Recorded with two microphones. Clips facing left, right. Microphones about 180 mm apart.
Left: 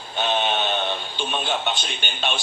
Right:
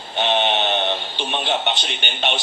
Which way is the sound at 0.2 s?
20° right (ahead or behind).